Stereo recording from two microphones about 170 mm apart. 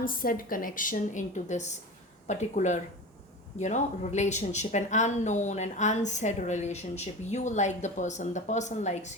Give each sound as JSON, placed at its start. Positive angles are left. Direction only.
{"t": 0.0, "sound": "speech", "side_deg": 55}